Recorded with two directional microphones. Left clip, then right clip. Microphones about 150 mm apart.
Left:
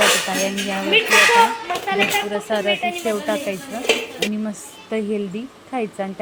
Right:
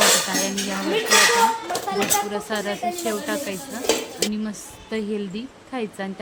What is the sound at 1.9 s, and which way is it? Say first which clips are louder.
A woman's voice: left 4 dB; 10° left (ahead or behind).